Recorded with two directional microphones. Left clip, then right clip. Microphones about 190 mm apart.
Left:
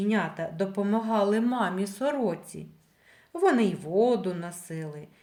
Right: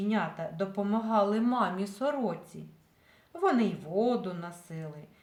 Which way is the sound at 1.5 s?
10° left (ahead or behind).